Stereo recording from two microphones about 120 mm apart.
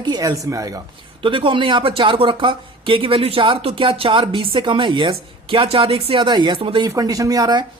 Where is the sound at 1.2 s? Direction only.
45° right (ahead or behind).